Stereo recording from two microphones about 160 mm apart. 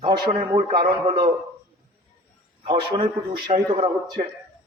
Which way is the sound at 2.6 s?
30° right (ahead or behind).